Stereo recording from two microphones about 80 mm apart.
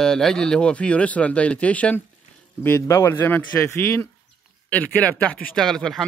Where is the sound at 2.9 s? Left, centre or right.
Left.